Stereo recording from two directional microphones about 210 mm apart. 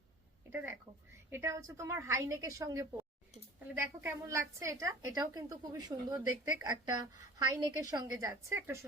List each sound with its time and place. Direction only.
0.5 s a woman's voice: 10° right (ahead or behind)